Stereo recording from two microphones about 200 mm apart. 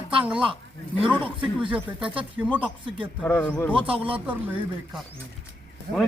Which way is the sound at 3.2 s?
10° left (ahead or behind).